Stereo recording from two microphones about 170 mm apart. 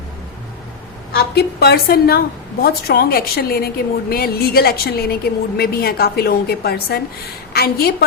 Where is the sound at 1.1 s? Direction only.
70° left (ahead or behind).